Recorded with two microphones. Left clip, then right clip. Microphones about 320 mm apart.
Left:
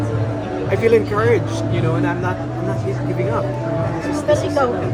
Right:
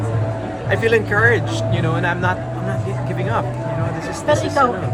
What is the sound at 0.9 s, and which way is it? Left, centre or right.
Speech, centre.